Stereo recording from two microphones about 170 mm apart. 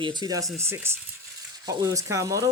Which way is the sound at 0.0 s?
25° right (ahead or behind).